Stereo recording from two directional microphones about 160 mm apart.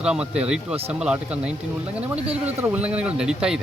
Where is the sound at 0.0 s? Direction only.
5° right (ahead or behind).